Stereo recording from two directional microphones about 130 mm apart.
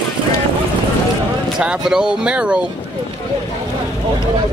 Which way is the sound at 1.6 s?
5° right (ahead or behind).